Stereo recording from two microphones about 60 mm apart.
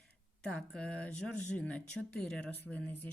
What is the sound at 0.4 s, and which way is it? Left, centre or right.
Speech, centre.